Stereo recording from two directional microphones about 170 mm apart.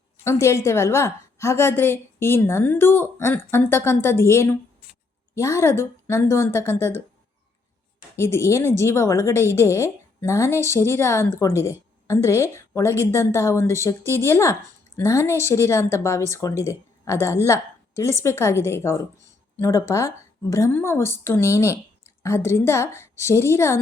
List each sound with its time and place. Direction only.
0.3 s a woman's voice: 15° left (ahead or behind)
8.1 s a woman's voice: 15° left (ahead or behind)